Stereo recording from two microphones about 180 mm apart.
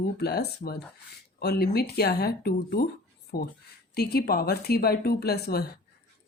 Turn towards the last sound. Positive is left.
turn(degrees=60)  # may be behind; listen again after turning